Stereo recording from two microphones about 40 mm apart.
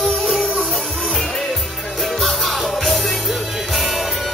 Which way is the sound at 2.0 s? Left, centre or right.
Centre.